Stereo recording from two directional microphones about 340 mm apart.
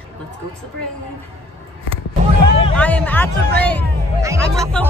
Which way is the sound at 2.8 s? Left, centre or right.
Centre.